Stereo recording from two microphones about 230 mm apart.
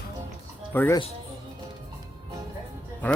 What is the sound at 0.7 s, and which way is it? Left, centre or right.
Speech, centre.